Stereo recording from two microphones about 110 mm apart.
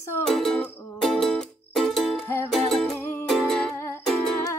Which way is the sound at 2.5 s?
Centre (ahead or behind).